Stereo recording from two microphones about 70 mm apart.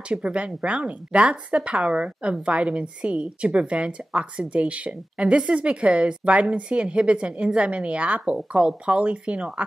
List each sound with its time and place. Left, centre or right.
0.1 s a woman's voice: centre